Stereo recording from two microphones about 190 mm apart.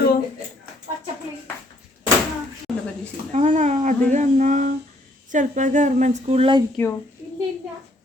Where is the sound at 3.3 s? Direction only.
35° right (ahead or behind).